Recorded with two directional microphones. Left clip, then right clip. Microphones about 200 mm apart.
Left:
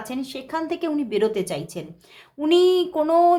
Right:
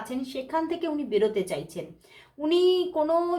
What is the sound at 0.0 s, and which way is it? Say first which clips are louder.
A woman's voice: left 2 dB; 35° left (ahead or behind).